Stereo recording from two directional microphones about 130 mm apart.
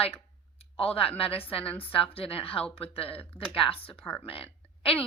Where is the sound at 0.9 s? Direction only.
45° left (ahead or behind).